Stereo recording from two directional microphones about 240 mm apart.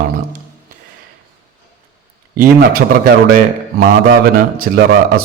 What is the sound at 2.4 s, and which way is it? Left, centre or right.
A man's voice, right.